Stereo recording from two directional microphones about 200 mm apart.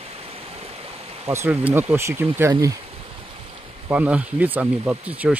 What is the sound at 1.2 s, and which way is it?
Speech, 10° right (ahead or behind).